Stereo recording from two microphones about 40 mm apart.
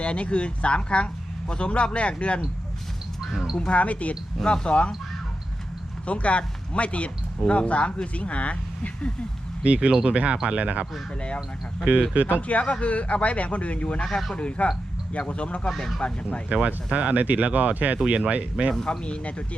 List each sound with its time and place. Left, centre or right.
0.0 s speech: left
3.7 s speech: left
4.4 s speech: left
6.1 s speech: left
9.6 s speech: right
12.1 s speech: right
12.4 s speech: left
16.6 s speech: right
18.9 s speech: left